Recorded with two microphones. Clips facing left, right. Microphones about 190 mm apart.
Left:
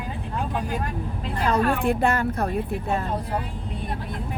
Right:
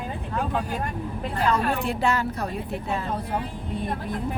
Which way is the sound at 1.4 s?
45° left (ahead or behind).